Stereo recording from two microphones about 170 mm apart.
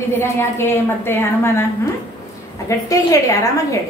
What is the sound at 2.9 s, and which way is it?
Speech, 20° left (ahead or behind).